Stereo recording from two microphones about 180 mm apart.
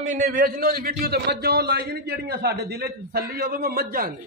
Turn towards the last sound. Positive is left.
turn(degrees=-55)  # may be behind; listen again after turning